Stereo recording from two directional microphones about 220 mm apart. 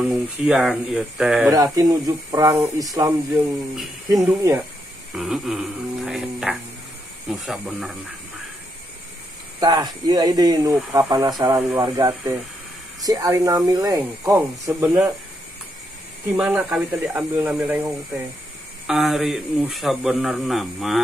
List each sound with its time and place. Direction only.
0.0 s a man's voice: centre (ahead or behind)
1.5 s speech: 15° right (ahead or behind)
4.1 s speech: 15° right (ahead or behind)
5.1 s a man's voice: centre (ahead or behind)
9.6 s speech: 20° right (ahead or behind)
16.3 s a man's voice: 5° right (ahead or behind)